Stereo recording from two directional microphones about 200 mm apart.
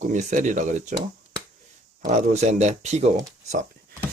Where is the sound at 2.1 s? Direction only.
35° right (ahead or behind).